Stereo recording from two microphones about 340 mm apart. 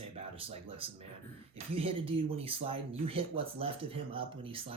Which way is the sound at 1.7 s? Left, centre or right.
Centre.